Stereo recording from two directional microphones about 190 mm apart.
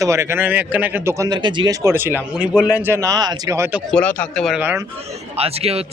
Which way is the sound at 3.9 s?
10° left (ahead or behind).